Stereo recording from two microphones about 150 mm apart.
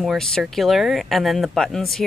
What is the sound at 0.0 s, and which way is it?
Speech, centre (ahead or behind).